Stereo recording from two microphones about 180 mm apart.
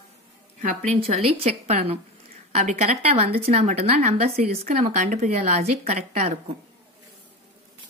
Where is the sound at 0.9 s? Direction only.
35° right (ahead or behind).